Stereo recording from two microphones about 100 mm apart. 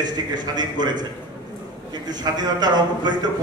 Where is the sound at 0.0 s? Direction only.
45° right (ahead or behind).